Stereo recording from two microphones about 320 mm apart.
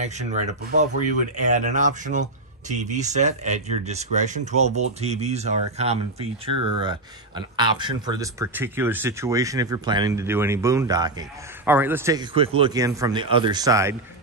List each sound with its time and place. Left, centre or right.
0.0 s speech: right